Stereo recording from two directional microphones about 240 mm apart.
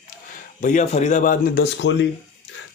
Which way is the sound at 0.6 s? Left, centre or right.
Left.